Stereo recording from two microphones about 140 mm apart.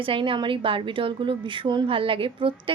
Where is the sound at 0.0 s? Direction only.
40° right (ahead or behind).